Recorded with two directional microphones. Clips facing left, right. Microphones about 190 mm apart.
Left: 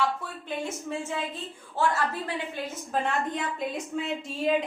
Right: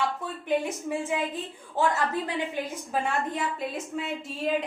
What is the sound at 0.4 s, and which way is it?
A woman's voice, 15° right (ahead or behind).